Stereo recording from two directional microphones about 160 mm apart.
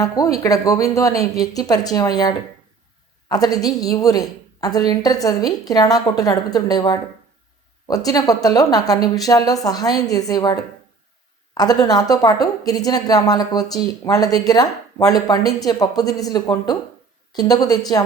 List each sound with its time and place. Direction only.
0.0 s a woman's voice: 20° left (ahead or behind)